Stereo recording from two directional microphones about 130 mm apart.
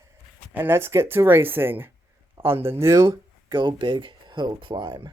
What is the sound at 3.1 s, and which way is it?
Speech, 35° right (ahead or behind).